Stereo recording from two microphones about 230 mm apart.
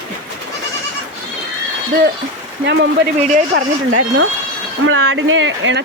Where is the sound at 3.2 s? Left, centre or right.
Right.